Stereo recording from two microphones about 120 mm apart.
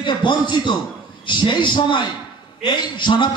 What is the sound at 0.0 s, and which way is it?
A man's voice, 40° left (ahead or behind).